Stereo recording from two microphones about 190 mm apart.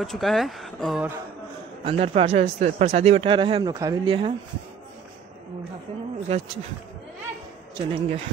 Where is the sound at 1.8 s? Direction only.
30° right (ahead or behind).